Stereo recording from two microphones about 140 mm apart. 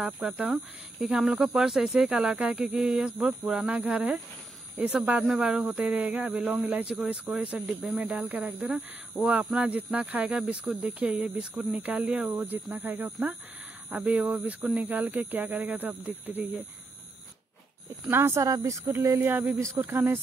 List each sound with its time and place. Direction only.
0.0 s a man's voice: 5° right (ahead or behind)
18.0 s a man's voice: 15° right (ahead or behind)